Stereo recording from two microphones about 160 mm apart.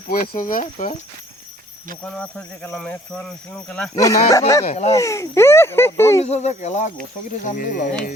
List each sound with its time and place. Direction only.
0.1 s speech: 60° left (ahead or behind)
2.0 s speech: 5° left (ahead or behind)
3.9 s speech: 20° left (ahead or behind)
4.7 s speech: 40° left (ahead or behind)
4.9 s speech: 20° left (ahead or behind)
6.2 s speech: 45° left (ahead or behind)
7.4 s speech: 60° left (ahead or behind)